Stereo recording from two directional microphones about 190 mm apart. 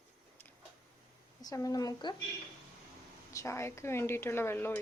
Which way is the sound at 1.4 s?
20° left (ahead or behind).